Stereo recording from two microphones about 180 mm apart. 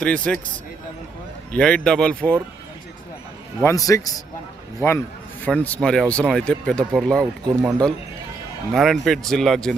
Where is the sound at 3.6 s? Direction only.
15° left (ahead or behind).